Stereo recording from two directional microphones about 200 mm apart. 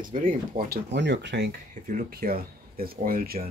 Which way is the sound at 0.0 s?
45° right (ahead or behind).